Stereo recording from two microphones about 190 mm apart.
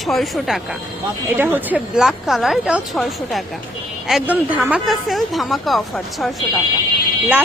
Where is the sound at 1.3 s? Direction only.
10° right (ahead or behind).